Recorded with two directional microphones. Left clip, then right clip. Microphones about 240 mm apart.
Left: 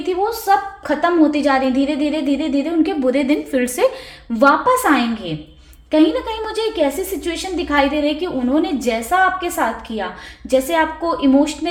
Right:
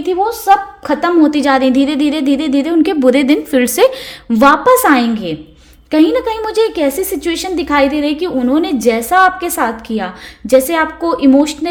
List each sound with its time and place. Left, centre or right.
0.3 s a woman's voice: right